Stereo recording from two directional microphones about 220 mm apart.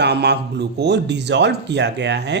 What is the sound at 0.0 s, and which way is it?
Speech, 50° right (ahead or behind).